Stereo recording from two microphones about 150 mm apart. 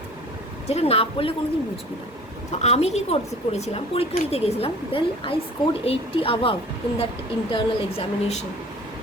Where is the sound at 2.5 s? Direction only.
45° left (ahead or behind).